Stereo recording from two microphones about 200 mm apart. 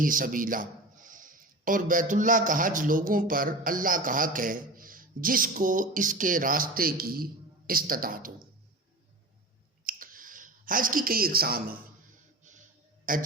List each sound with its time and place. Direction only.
0.0 s a man's voice: 45° right (ahead or behind)
9.8 s clicking: 45° right (ahead or behind)
13.1 s a man's voice: 45° right (ahead or behind)